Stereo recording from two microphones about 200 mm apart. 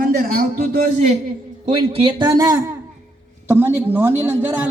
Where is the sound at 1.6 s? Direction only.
25° right (ahead or behind).